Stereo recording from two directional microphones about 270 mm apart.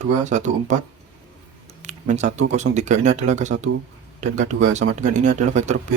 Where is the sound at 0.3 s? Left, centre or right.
Right.